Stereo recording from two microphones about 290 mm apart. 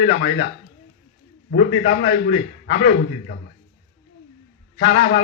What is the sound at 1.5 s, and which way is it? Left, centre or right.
A man's voice, left.